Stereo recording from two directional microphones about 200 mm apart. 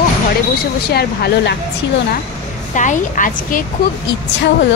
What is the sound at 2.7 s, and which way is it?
Speech, 40° left (ahead or behind).